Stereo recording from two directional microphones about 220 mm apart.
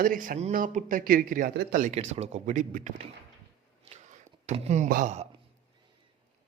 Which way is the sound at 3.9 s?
30° right (ahead or behind).